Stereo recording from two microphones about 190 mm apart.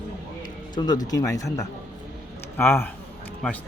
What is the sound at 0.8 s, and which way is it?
Speech, 20° left (ahead or behind).